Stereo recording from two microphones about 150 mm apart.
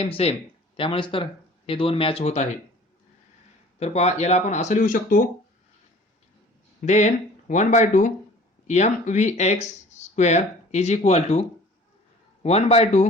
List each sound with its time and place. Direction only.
0.0 s speech: 40° left (ahead or behind)
3.8 s speech: 45° left (ahead or behind)
6.8 s speech: 50° left (ahead or behind)